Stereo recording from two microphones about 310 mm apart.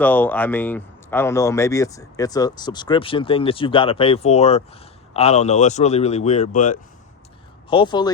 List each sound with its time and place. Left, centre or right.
0.0 s speech: centre